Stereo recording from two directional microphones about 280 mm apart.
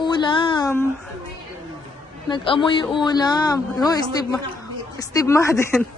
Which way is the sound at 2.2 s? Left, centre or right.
Centre.